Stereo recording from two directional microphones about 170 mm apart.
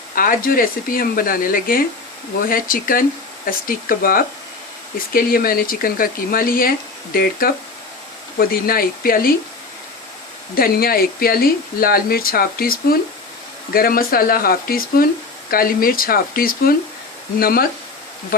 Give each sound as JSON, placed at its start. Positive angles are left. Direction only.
{"t": 0.1, "sound": "speech", "side_deg": 55}
{"t": 10.5, "sound": "speech", "side_deg": 60}